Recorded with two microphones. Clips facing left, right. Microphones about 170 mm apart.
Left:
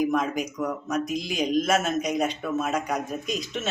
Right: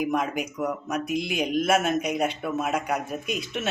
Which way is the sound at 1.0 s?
60° right (ahead or behind).